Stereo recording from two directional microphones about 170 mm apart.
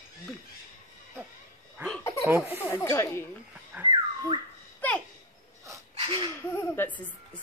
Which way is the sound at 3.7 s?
10° right (ahead or behind).